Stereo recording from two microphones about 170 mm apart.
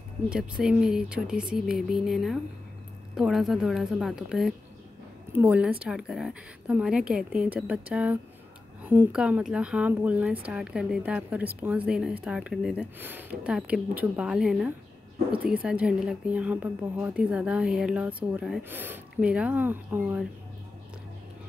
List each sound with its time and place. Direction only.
0.3 s speech: 5° right (ahead or behind)